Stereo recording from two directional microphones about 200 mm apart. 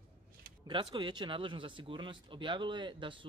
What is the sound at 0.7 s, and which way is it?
A man's voice, 25° right (ahead or behind).